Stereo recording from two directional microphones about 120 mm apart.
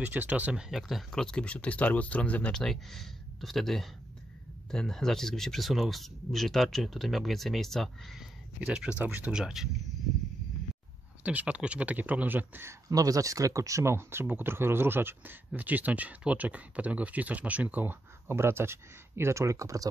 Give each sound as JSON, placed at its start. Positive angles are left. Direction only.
{"t": 0.0, "sound": "speech", "side_deg": -15}
{"t": 11.2, "sound": "speech", "side_deg": -10}
{"t": 12.9, "sound": "speech", "side_deg": -30}